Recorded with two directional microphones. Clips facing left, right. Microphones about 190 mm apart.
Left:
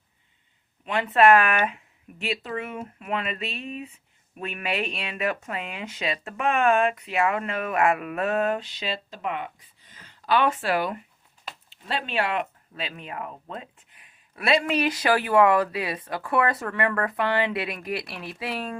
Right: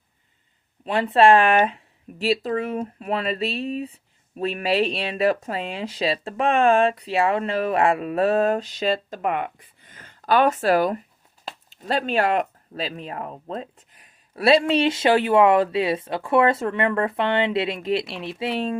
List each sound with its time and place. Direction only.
0.9 s speech: 30° right (ahead or behind)